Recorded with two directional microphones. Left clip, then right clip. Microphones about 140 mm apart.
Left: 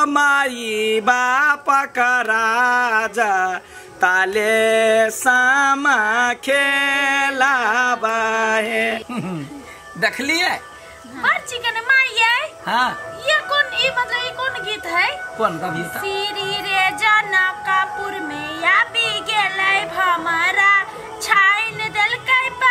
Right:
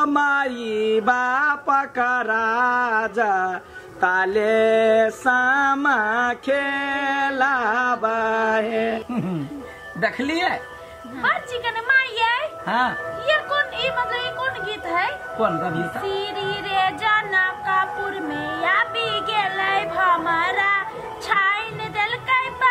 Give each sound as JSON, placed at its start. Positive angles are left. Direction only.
{"t": 0.0, "sound": "music", "side_deg": 10}
{"t": 11.2, "sound": "speech", "side_deg": 5}